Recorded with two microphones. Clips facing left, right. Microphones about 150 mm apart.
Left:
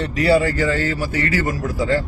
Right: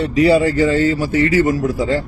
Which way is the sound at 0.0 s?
20° right (ahead or behind).